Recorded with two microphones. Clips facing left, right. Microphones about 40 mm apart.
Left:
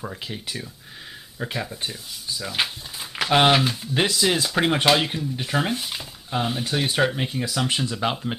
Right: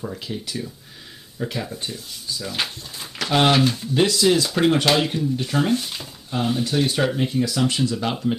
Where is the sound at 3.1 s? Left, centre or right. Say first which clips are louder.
Left 1 dB; centre.